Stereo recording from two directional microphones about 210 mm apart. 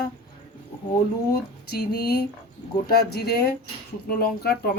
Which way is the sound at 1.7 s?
50° left (ahead or behind).